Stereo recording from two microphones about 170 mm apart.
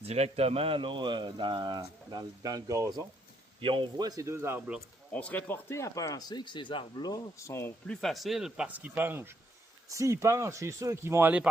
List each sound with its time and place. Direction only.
0.0 s speech: 40° right (ahead or behind); by 3.1 s 20° right (ahead or behind)
3.6 s speech: 30° right (ahead or behind)
4.4 s speech: 10° right (ahead or behind)
5.1 s speech: 10° left (ahead or behind)
8.0 s speech: centre (ahead or behind)